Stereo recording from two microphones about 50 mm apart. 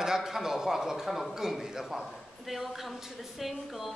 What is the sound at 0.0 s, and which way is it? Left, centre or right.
A man's voice, centre.